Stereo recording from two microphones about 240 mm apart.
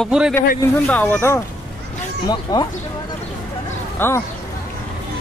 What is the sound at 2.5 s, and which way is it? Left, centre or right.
Speech, centre.